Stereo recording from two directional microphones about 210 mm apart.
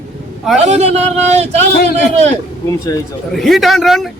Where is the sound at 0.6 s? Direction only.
30° right (ahead or behind).